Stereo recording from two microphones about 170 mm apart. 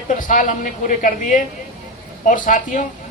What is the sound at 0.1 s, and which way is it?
Speech, 50° left (ahead or behind).